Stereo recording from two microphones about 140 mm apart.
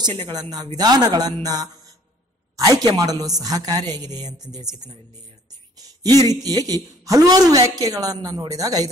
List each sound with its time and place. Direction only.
0.2 s a man's voice: 30° right (ahead or behind)
6.2 s a man's voice: 25° right (ahead or behind)